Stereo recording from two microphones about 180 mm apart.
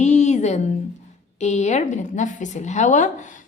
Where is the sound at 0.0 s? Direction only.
40° left (ahead or behind).